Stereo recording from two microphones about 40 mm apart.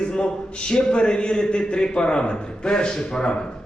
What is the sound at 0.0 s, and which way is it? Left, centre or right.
A man's voice, left.